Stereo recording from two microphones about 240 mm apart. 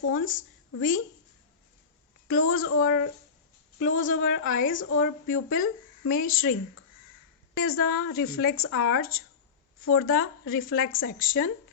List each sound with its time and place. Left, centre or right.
0.0 s a woman's voice: left
2.2 s a woman's voice: left